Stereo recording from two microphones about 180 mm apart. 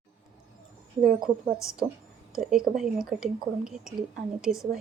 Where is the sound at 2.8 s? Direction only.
5° right (ahead or behind).